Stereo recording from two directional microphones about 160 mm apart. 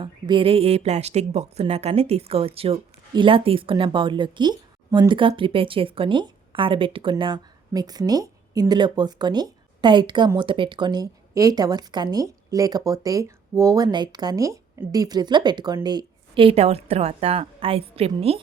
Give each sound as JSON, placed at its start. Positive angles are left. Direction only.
{"t": 0.0, "sound": "a woman's voice", "side_deg": -30}